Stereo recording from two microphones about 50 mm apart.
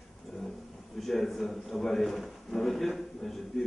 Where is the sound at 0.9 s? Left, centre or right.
Centre.